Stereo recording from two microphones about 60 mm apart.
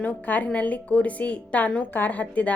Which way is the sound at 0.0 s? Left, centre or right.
Left.